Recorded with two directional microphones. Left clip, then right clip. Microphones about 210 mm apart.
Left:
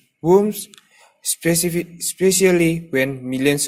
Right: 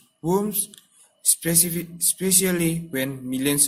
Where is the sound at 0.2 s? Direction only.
30° left (ahead or behind).